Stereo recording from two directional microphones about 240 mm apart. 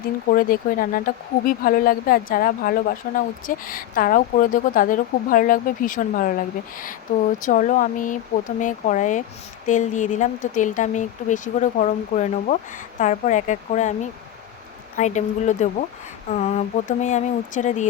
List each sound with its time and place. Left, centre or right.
0.3 s speech: left